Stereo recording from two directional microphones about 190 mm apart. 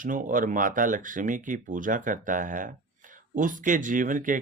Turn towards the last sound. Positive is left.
turn(degrees=-45)  # may be behind; listen again after turning